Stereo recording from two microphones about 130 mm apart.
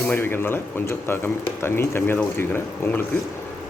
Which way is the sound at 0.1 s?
15° left (ahead or behind).